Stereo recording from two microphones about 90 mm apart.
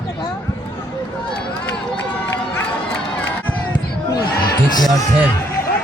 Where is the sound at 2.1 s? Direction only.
20° left (ahead or behind).